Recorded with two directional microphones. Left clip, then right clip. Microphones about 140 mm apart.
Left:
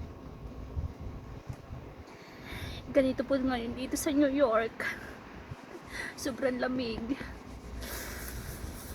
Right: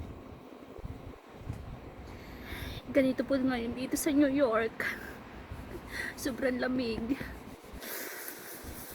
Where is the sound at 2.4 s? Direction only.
30° right (ahead or behind).